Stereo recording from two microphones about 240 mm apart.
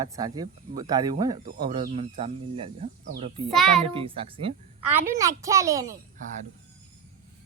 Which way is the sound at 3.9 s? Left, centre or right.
Right.